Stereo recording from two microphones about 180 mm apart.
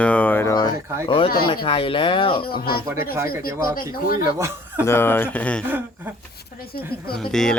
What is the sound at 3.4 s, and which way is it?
Speech, 55° left (ahead or behind).